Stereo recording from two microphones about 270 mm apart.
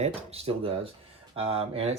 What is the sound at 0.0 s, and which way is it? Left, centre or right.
Speech, right.